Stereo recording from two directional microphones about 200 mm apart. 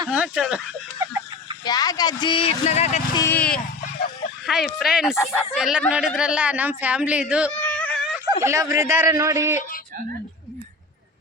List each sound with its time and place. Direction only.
0.1 s speech: 5° right (ahead or behind)
1.6 s speech: 20° left (ahead or behind)
3.2 s speech: 10° left (ahead or behind); by 7.5 s 5° right (ahead or behind)
7.7 s a sound: 5° left (ahead or behind)
8.4 s speech: 15° right (ahead or behind)